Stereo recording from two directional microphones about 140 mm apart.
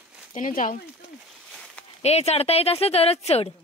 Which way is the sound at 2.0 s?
50° left (ahead or behind).